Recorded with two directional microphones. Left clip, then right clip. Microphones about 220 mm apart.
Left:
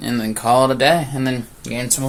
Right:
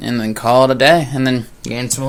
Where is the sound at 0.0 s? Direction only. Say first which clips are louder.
Right 3 dB; 35° right (ahead or behind).